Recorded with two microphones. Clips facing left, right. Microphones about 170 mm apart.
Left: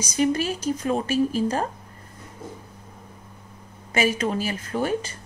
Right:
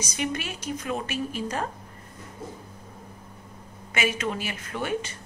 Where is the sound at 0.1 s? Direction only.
35° left (ahead or behind).